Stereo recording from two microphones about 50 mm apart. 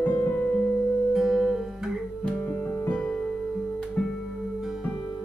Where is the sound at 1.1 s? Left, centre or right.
Centre.